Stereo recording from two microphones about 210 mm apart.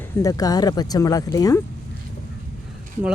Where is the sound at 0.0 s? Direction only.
15° left (ahead or behind).